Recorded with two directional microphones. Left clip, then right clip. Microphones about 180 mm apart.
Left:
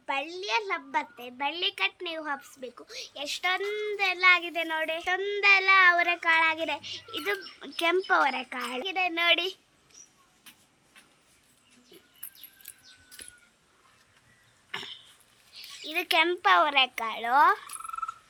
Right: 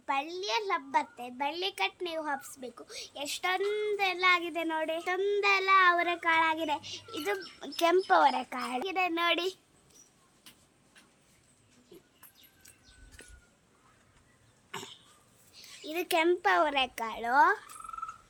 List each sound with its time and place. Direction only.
0.9 s a child's voice: 40° right (ahead or behind)
14.7 s cough: 45° right (ahead or behind)
15.5 s a sound: 45° right (ahead or behind)
15.9 s speech: 40° right (ahead or behind)